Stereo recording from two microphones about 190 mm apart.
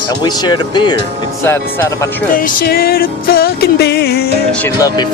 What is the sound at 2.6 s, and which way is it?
Music, 55° left (ahead or behind).